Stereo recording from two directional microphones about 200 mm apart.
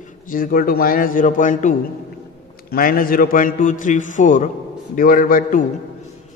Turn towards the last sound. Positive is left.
turn(degrees=40)  # may be behind; listen again after turning